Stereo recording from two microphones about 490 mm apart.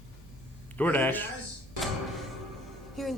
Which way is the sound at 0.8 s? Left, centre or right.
Centre.